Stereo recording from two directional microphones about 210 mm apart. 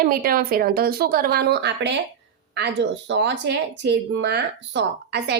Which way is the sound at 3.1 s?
55° right (ahead or behind).